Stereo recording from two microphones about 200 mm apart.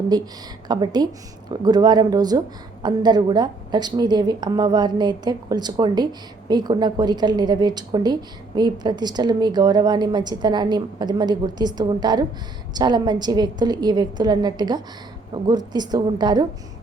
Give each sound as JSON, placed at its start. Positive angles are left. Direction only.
{"t": 0.1, "sound": "a woman's voice", "side_deg": -20}